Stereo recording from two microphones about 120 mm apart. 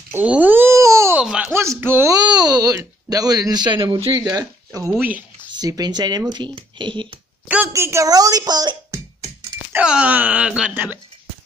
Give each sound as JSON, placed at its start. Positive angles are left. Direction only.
{"t": 0.1, "sound": "a sound", "side_deg": -10}
{"t": 1.1, "sound": "speech", "side_deg": -10}
{"t": 1.5, "sound": "speech", "side_deg": -20}
{"t": 2.1, "sound": "speech", "side_deg": -35}
{"t": 4.3, "sound": "speech", "side_deg": -30}
{"t": 5.0, "sound": "a sound", "side_deg": -15}
{"t": 5.6, "sound": "speech", "side_deg": -35}
{"t": 7.6, "sound": "speech", "side_deg": -25}
{"t": 8.9, "sound": "a sound", "side_deg": -20}
{"t": 9.8, "sound": "speech", "side_deg": -10}